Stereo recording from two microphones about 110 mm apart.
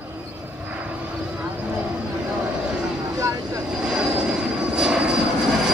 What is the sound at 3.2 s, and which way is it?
Vehicle, 30° right (ahead or behind).